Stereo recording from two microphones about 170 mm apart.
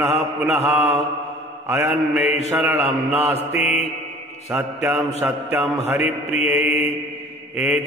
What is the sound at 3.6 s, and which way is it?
Mantra, 40° left (ahead or behind).